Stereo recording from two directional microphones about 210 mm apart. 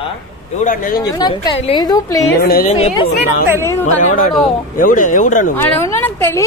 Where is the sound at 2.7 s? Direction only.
30° left (ahead or behind).